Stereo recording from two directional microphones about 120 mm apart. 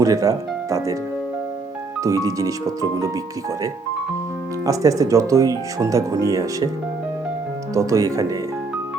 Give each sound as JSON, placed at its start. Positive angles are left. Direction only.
{"t": 0.0, "sound": "speech", "side_deg": -30}
{"t": 2.0, "sound": "speech", "side_deg": -30}
{"t": 4.6, "sound": "speech", "side_deg": -30}
{"t": 7.7, "sound": "speech", "side_deg": -25}